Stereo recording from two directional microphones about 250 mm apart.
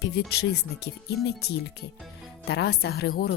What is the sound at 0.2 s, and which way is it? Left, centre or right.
Speech, left.